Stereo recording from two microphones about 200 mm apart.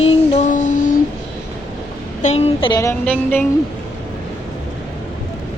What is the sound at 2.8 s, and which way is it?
Speech, 10° left (ahead or behind).